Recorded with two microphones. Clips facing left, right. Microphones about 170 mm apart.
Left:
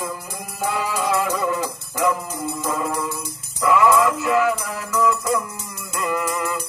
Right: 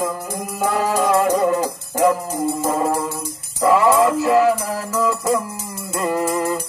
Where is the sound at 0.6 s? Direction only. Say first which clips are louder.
Right 5 dB; 45° right (ahead or behind).